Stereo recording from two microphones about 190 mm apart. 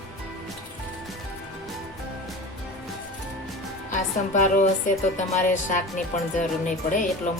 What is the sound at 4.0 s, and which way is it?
A woman's voice, 40° left (ahead or behind).